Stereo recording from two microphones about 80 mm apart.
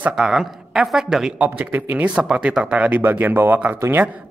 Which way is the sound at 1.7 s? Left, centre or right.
Right.